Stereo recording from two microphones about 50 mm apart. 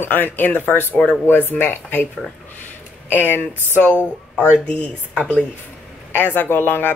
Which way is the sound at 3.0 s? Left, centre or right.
Left.